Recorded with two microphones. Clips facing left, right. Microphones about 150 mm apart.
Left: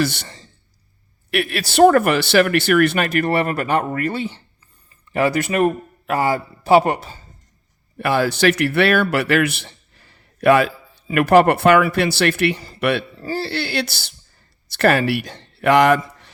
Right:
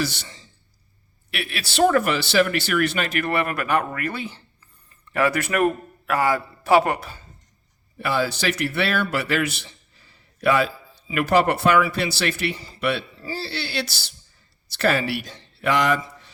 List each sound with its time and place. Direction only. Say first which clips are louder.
0.0 s a man's voice: left 6 dB; 60° left (ahead or behind); by 7.2 s 30° left (ahead or behind)
7.9 s a man's voice: left 5 dB; 55° left (ahead or behind)